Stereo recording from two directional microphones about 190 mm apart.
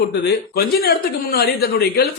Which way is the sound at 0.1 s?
55° left (ahead or behind).